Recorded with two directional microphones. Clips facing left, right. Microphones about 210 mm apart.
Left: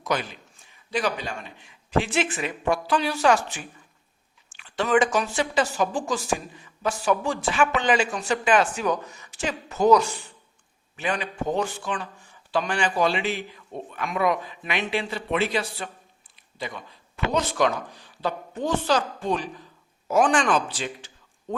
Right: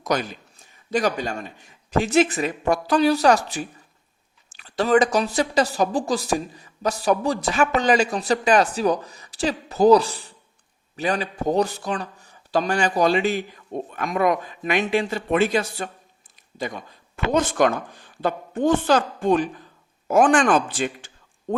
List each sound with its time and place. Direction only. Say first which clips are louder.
0.0 s a man's voice: right 3 dB; 45° right (ahead or behind)